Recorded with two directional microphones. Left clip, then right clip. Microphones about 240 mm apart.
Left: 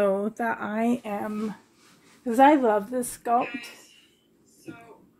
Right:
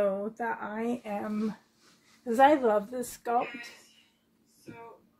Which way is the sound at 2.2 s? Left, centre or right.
Left.